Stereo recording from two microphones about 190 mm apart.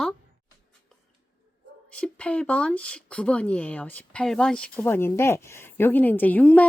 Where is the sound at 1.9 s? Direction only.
5° left (ahead or behind).